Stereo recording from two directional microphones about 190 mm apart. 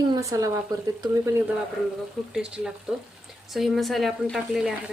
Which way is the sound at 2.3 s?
5° right (ahead or behind).